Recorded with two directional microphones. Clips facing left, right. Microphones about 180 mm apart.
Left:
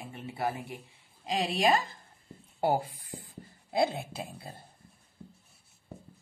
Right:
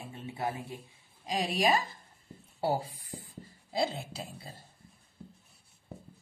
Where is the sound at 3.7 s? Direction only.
55° left (ahead or behind).